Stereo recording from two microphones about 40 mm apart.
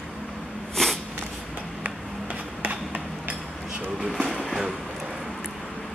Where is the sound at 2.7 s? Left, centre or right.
Right.